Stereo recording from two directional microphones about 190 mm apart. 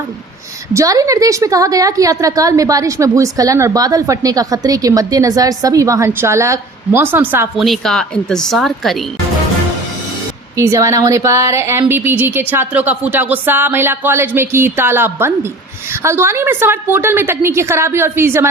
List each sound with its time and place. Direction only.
0.7 s a woman's voice: 15° right (ahead or behind); by 9.0 s centre (ahead or behind)
10.6 s a woman's voice: 15° right (ahead or behind)